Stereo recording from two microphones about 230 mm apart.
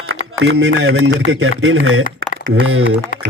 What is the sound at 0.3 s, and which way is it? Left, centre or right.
Speech, right.